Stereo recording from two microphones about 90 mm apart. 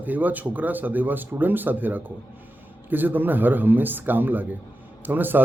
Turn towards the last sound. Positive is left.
turn(degrees=-20)  # may be behind; listen again after turning